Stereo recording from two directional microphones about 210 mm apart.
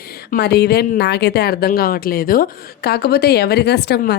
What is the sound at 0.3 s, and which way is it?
A woman's voice, 50° left (ahead or behind).